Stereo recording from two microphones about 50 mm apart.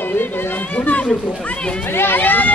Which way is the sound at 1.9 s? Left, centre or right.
Left.